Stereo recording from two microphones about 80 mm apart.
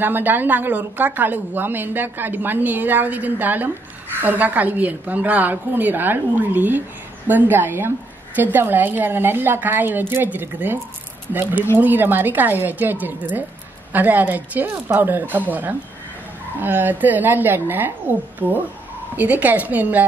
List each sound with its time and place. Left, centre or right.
0.0 s a woman's voice: right
11.8 s a woman's voice: right